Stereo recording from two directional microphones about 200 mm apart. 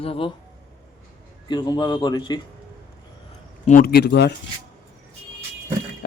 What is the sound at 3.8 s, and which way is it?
Speech, 55° left (ahead or behind).